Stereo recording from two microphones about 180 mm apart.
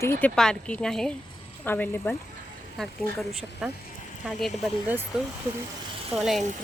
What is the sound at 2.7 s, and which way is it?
Speech, centre (ahead or behind).